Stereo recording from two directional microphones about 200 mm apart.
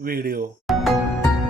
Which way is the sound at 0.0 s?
50° right (ahead or behind).